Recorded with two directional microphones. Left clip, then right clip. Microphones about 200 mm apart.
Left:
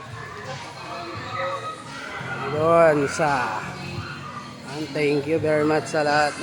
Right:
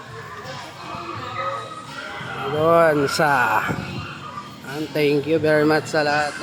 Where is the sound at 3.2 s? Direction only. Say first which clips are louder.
Right 4 dB; 20° right (ahead or behind).